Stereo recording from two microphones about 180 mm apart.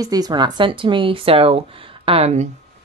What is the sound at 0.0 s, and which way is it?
A woman's voice, 20° right (ahead or behind).